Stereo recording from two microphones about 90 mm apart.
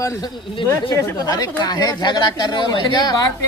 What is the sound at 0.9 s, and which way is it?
Speech, 45° left (ahead or behind).